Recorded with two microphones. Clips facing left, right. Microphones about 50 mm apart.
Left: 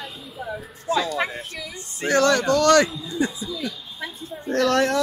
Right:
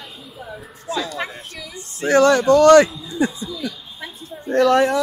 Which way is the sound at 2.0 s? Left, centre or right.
Centre.